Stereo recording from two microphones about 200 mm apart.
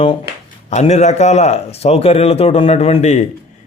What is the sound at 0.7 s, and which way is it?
Speech, 35° left (ahead or behind).